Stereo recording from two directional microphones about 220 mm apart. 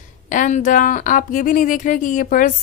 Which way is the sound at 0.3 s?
35° left (ahead or behind).